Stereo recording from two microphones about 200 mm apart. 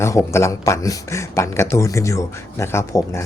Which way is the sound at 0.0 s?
15° left (ahead or behind).